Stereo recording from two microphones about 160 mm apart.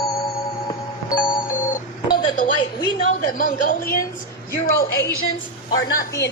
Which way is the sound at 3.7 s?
70° left (ahead or behind).